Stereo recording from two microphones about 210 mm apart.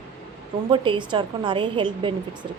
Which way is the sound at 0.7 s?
25° right (ahead or behind).